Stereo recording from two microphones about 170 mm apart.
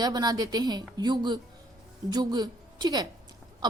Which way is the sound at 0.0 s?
25° right (ahead or behind).